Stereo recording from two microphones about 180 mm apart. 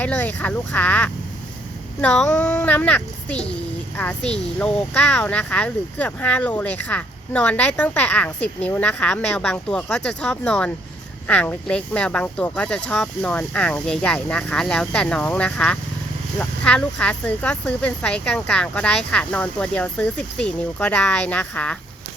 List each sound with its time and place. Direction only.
0.0 s speech: 10° left (ahead or behind)
3.5 s a sound: 10° left (ahead or behind)
4.6 s speech: 5° left (ahead or behind)